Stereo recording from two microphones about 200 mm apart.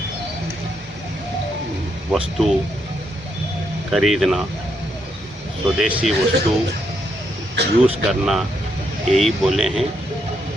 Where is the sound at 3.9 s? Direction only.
Centre (ahead or behind).